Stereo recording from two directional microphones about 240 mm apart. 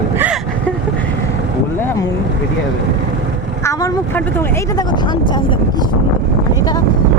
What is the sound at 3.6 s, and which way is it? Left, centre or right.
Speech, centre.